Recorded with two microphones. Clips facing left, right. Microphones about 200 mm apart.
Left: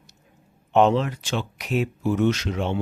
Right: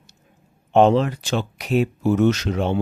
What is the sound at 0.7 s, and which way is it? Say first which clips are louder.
Speech: right 3 dB; 35° right (ahead or behind).